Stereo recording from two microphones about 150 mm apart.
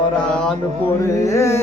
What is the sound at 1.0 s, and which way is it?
Carnatic music, 20° left (ahead or behind).